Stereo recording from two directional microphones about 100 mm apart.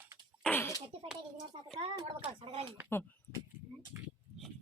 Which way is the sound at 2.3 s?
70° right (ahead or behind).